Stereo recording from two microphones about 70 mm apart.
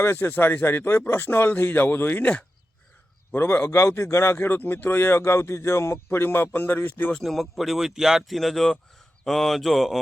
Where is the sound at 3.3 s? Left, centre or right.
Left.